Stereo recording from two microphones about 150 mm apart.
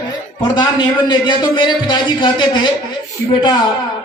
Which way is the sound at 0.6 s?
30° left (ahead or behind).